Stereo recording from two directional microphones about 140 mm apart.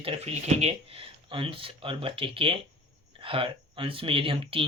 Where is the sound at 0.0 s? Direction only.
50° right (ahead or behind).